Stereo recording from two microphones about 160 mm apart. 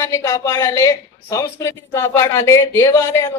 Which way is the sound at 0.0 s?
20° left (ahead or behind).